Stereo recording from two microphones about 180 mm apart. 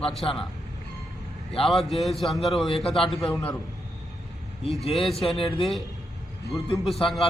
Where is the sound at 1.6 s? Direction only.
Centre (ahead or behind).